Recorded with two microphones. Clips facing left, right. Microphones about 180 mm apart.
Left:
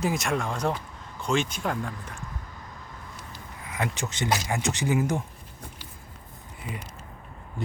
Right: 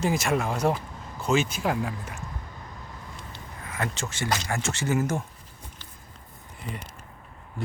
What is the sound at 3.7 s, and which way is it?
Speech, 15° left (ahead or behind).